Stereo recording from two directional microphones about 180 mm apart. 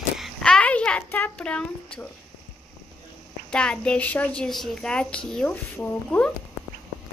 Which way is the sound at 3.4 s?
5° left (ahead or behind).